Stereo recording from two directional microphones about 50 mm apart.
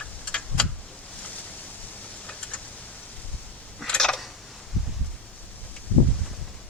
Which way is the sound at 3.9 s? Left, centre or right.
Centre.